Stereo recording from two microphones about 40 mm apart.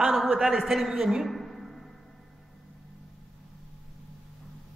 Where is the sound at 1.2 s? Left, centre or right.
Centre.